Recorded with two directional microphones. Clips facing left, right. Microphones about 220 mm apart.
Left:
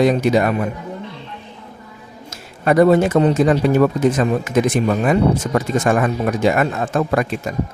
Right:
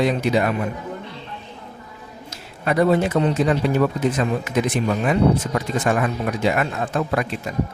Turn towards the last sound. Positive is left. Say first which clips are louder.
# left 4 dB
turn(degrees=45)  # may be behind; listen again after turning